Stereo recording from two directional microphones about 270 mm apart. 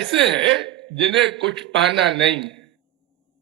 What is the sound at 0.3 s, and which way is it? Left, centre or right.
A man's voice, right.